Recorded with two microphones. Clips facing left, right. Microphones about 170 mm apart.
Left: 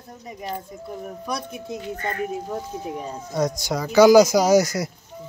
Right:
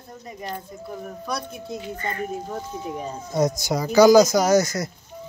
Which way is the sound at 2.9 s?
5° right (ahead or behind).